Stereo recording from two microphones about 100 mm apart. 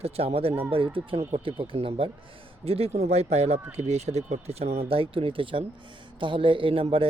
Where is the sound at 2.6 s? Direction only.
80° right.